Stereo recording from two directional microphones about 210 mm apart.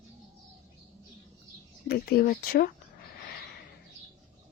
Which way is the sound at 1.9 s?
45° left (ahead or behind).